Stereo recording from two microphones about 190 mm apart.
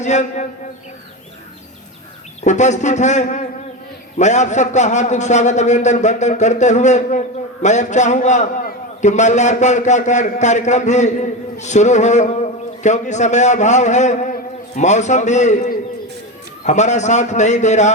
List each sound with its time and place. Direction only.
0.0 s a man's voice: 40° left (ahead or behind)
2.4 s a man's voice: 40° left (ahead or behind)